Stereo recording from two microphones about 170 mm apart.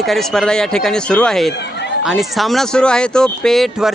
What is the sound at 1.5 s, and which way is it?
Speech, 80° left.